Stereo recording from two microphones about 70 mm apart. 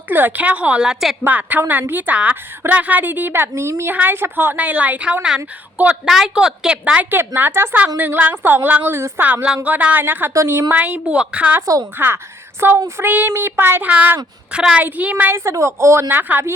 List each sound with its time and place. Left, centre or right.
0.1 s a woman's voice: right; by 1.1 s centre
1.2 s a woman's voice: right
3.5 s a woman's voice: right
3.8 s a woman's voice: right
4.5 s a woman's voice: right
6.1 s a woman's voice: centre
7.1 s a woman's voice: right
9.0 s a woman's voice: right
9.2 s a woman's voice: right
11.6 s a woman's voice: right
11.9 s a woman's voice: right
15.3 s a woman's voice: right